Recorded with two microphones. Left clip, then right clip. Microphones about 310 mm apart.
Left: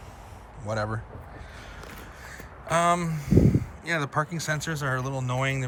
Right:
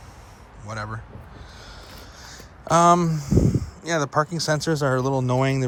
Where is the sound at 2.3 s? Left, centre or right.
Centre.